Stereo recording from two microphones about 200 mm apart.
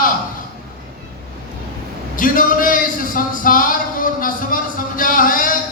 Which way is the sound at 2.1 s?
45° left (ahead or behind).